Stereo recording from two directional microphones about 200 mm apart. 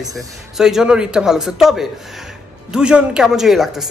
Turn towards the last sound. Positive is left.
turn(degrees=0)  # may be behind; listen again after turning